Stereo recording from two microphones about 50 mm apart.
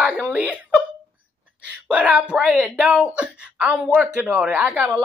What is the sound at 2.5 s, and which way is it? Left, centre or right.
Speech, centre.